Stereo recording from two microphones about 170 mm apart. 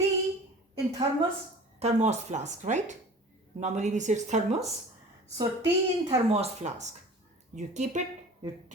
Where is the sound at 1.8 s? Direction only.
40° right (ahead or behind).